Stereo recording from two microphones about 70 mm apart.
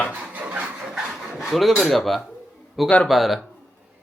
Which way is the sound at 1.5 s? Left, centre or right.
Centre.